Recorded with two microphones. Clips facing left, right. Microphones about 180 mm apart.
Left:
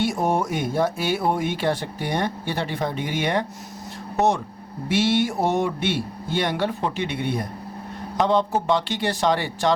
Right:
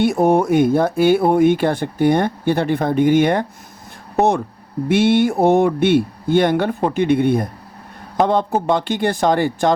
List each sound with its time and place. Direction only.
0.0 s speech: 60° right (ahead or behind)
4.9 s speech: 55° right (ahead or behind)